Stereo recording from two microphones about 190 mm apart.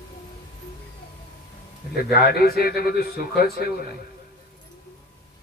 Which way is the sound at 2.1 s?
55° left (ahead or behind).